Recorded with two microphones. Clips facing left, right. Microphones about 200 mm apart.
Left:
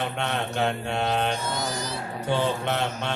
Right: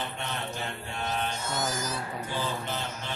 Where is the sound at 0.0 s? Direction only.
75° left (ahead or behind).